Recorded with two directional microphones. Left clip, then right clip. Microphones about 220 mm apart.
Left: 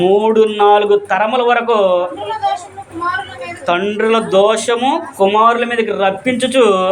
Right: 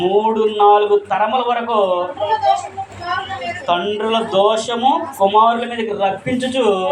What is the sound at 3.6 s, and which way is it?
Speech, 45° left (ahead or behind).